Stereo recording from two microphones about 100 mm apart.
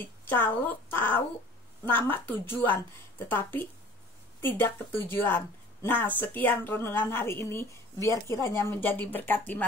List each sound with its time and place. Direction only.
0.2 s a woman's voice: 15° left (ahead or behind)